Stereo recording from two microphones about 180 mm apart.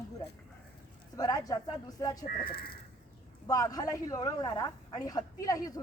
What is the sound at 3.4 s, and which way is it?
A woman's voice, 20° left (ahead or behind).